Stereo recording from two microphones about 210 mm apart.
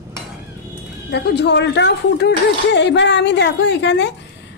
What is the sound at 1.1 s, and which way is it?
A woman's voice, 55° left (ahead or behind).